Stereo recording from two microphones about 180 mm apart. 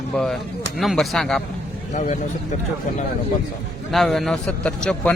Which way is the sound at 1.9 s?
45° left (ahead or behind).